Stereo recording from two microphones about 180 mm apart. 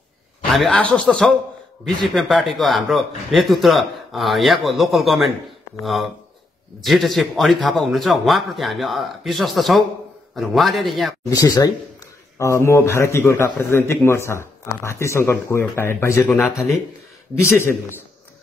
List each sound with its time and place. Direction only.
0.5 s a man's voice: centre (ahead or behind)
11.2 s a man's voice: 20° left (ahead or behind)